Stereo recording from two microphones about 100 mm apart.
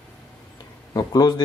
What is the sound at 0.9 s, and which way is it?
Speech, 40° left (ahead or behind).